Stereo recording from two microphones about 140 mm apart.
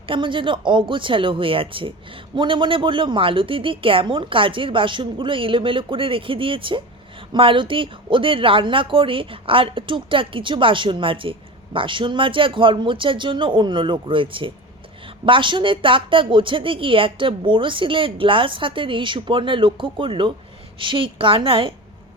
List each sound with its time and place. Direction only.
0.1 s speech: 35° right (ahead or behind)